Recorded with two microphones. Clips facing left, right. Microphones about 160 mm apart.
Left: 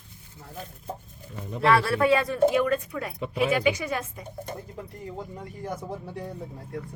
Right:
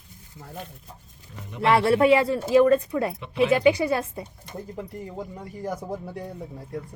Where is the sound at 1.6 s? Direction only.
25° right (ahead or behind).